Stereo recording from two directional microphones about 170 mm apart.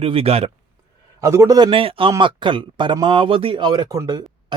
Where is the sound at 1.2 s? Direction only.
20° right (ahead or behind).